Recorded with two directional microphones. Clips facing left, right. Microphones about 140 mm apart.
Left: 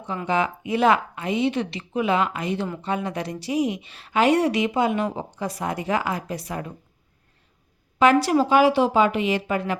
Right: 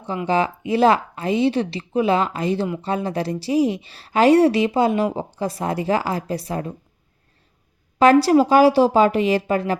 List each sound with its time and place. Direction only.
0.3 s a woman's voice: 30° right (ahead or behind)
7.9 s a woman's voice: 35° right (ahead or behind)